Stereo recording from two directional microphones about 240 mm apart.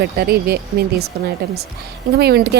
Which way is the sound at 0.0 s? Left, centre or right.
Right.